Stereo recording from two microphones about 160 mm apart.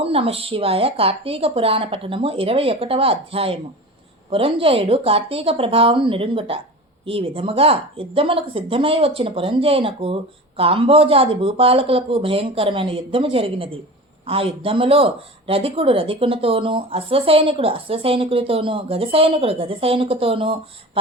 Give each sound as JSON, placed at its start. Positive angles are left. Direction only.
{"t": 0.0, "sound": "speech", "side_deg": -35}